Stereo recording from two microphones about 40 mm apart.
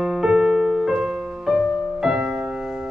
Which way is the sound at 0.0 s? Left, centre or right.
Centre.